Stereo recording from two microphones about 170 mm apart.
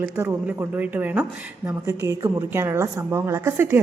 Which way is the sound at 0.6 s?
10° right (ahead or behind).